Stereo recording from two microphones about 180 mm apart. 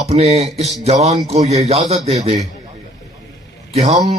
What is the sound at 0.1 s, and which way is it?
Speech, 35° right (ahead or behind).